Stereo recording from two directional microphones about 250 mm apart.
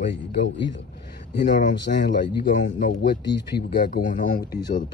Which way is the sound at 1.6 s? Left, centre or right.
Left.